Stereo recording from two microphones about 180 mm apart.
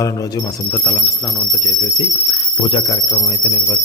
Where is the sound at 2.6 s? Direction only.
30° left (ahead or behind).